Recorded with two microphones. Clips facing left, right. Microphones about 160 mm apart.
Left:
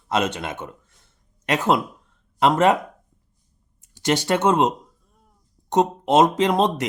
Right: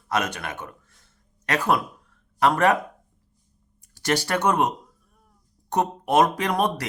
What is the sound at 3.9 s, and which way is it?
Speech, 20° left (ahead or behind).